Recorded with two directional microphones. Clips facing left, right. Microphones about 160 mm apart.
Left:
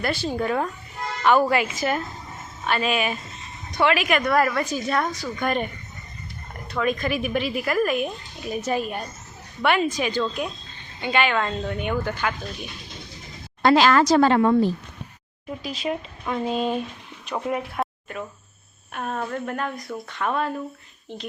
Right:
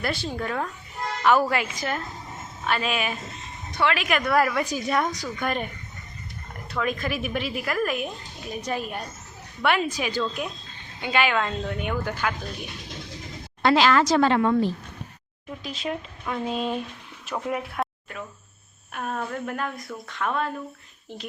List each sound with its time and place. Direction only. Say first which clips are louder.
0.0 s a woman's voice: left 3 dB; centre (ahead or behind)
0.3 s speech: left 5 dB; 15° left (ahead or behind)
1.2 s a woman's voice: left 2 dB; 5° right (ahead or behind)
5.4 s a woman's voice: left 3 dB; centre (ahead or behind)
6.7 s a woman's voice: left 3 dB; centre (ahead or behind)
13.6 s speech: left 2 dB; 40° left (ahead or behind)
15.6 s a woman's voice: left 3 dB; 5° left (ahead or behind)
17.4 s a sound: left 2 dB; centre (ahead or behind)
18.9 s a woman's voice: left 2 dB; centre (ahead or behind)